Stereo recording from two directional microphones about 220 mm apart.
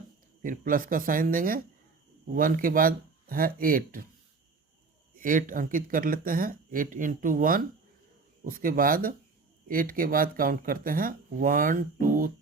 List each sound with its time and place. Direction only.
0.4 s speech: 40° right (ahead or behind)
5.1 s speech: 40° right (ahead or behind)